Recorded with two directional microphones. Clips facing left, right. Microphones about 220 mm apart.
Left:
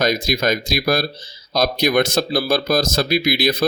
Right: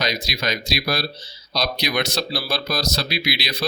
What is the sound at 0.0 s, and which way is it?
Speech, 50° left (ahead or behind).